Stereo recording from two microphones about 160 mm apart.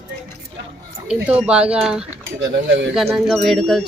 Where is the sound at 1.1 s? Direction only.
10° right (ahead or behind).